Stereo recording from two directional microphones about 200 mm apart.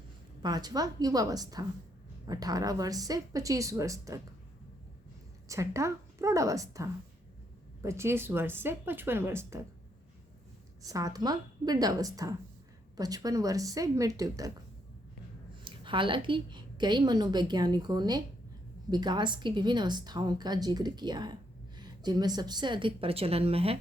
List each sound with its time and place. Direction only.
0.4 s a woman's voice: 20° right (ahead or behind)
5.5 s speech: 15° right (ahead or behind)
10.8 s speech: 15° right (ahead or behind)
15.6 s a woman's voice: 25° right (ahead or behind)